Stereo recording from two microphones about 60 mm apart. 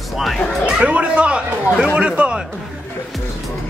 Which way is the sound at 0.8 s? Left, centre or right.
Right.